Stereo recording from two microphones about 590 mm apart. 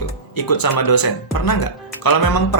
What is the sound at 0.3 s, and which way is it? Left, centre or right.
Speech, left.